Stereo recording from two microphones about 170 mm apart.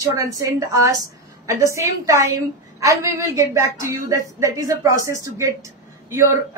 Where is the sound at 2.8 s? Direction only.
20° right (ahead or behind).